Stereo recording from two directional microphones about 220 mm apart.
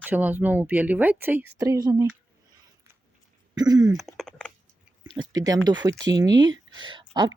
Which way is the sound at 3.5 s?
15° right (ahead or behind).